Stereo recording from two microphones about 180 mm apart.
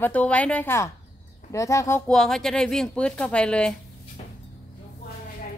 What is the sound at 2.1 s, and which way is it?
Speech, centre (ahead or behind).